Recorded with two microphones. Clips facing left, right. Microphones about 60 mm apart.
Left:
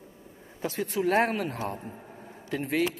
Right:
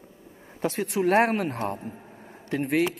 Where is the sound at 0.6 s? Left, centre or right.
Right.